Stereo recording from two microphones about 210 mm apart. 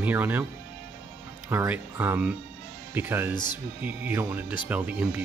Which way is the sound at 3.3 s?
20° left (ahead or behind).